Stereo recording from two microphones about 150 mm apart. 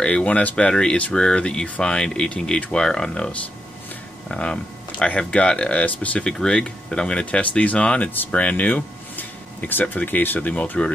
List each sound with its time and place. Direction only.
0.0 s speech: 10° left (ahead or behind)